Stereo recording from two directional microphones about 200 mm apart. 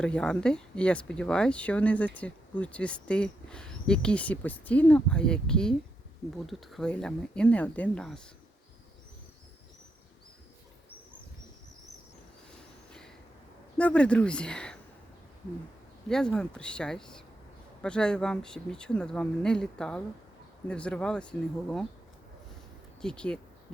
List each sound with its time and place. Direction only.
0.0 s speech: 5° left (ahead or behind)
13.7 s speech: 5° left (ahead or behind)
16.0 s speech: 5° left (ahead or behind)
23.0 s speech: 5° left (ahead or behind)